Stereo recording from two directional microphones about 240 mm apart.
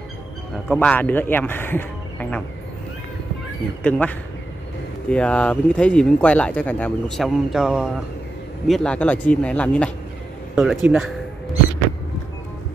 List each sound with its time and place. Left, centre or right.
0.7 s speech: centre
3.8 s speech: centre